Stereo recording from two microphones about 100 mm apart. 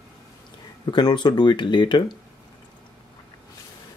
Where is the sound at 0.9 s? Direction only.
45° left (ahead or behind).